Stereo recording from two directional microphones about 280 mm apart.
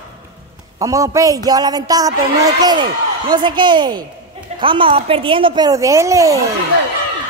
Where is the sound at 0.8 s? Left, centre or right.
Centre.